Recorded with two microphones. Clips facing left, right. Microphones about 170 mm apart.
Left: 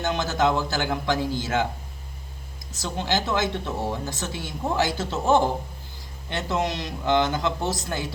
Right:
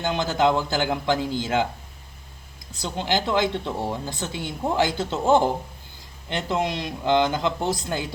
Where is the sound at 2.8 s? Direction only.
15° right (ahead or behind).